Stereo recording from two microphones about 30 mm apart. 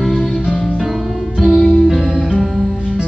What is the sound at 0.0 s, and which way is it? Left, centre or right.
Music, centre.